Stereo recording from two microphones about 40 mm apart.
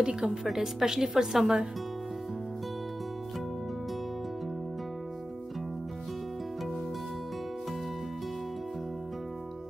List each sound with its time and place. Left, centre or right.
0.0 s a woman's voice: centre
0.4 s a woman's voice: centre